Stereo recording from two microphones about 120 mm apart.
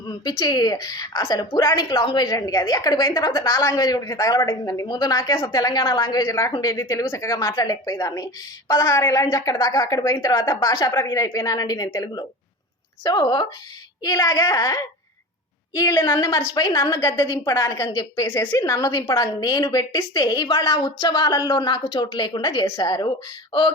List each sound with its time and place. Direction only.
0.1 s a woman's voice: 35° left (ahead or behind)